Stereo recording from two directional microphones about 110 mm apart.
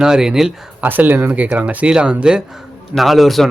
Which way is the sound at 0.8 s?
15° right (ahead or behind).